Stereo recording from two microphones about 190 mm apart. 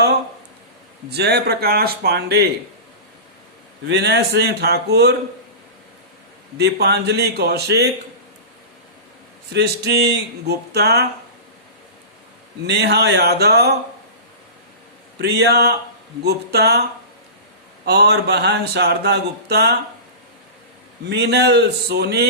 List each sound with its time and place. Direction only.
1.1 s speech: 60° right (ahead or behind)
3.8 s speech: 60° right (ahead or behind)
6.6 s speech: 60° right (ahead or behind)
9.5 s speech: 60° right (ahead or behind)
12.6 s speech: 60° right (ahead or behind)
15.2 s speech: 60° right (ahead or behind)
17.8 s speech: 60° right (ahead or behind)
21.1 s speech: 60° right (ahead or behind)